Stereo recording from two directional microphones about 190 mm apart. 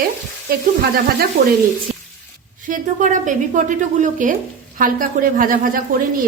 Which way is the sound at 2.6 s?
45° right (ahead or behind).